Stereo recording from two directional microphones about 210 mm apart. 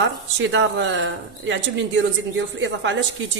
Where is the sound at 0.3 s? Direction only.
60° right (ahead or behind).